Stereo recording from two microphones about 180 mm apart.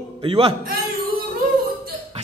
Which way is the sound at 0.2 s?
30° right (ahead or behind).